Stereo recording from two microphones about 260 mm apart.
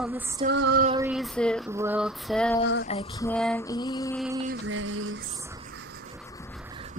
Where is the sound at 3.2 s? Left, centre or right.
Centre.